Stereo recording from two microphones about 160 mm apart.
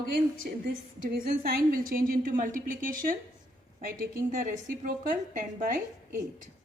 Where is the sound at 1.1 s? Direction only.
65° right (ahead or behind).